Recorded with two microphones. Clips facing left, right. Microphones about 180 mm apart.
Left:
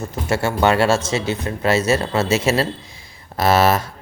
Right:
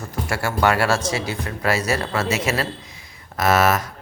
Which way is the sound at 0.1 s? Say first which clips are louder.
Left 3 dB; 25° left (ahead or behind).